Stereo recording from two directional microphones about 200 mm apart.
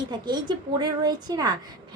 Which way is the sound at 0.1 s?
20° right (ahead or behind).